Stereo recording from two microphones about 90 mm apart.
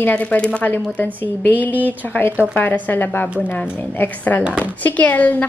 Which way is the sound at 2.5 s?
20° left (ahead or behind).